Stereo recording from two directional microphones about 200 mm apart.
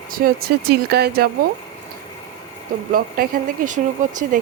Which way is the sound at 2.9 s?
45° right (ahead or behind).